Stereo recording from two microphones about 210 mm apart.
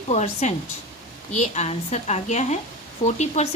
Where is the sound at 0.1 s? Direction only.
35° left (ahead or behind).